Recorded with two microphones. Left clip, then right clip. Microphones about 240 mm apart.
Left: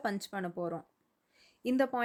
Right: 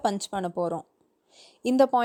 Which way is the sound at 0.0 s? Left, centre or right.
Right.